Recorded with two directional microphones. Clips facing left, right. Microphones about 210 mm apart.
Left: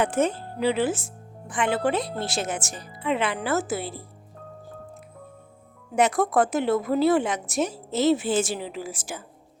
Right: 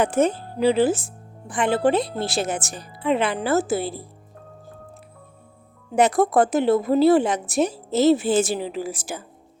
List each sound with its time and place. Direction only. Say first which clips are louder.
0.0 s speech: right 3 dB; 40° right (ahead or behind)
5.9 s speech: right 4 dB; 35° right (ahead or behind)